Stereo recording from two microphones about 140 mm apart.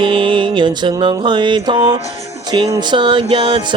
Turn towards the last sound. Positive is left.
turn(degrees=-35)  # may be behind; listen again after turning